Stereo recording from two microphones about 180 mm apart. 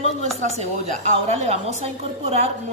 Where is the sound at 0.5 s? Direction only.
40° right (ahead or behind).